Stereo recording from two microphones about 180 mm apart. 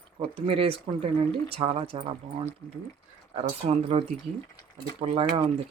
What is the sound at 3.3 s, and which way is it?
Speech, 30° right (ahead or behind).